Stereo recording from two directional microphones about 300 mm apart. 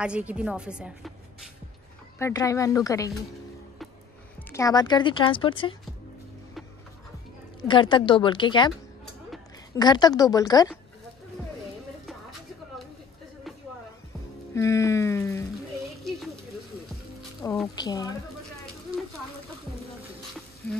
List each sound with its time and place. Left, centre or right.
0.0 s a woman's voice: centre
2.1 s a woman's voice: centre
4.5 s a woman's voice: centre
7.6 s a woman's voice: centre
9.8 s a woman's voice: centre
14.5 s a woman's voice: centre
17.4 s a woman's voice: centre